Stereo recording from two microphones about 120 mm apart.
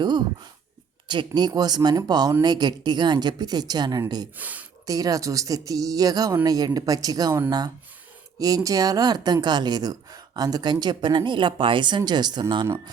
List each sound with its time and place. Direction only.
0.0 s a sound: 40° right (ahead or behind)
1.0 s a woman's voice: 40° right (ahead or behind)
4.4 s speech: 15° right (ahead or behind)
4.9 s a woman's voice: 30° right (ahead or behind)